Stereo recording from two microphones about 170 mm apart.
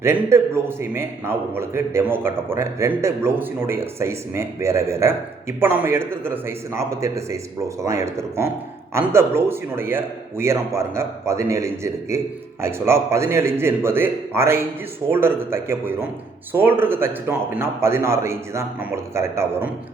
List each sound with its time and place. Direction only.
0.0 s a man's voice: 15° right (ahead or behind)